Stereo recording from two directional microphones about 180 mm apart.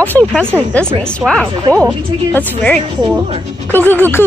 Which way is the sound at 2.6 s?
5° left (ahead or behind).